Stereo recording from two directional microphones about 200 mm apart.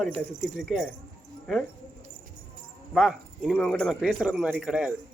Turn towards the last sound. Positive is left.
turn(degrees=-5)  # may be behind; listen again after turning